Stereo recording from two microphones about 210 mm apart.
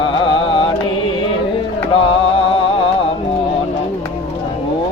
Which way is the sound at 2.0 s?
25° left (ahead or behind).